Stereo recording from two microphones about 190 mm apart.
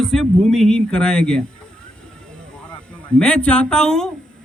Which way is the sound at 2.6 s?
5° left (ahead or behind).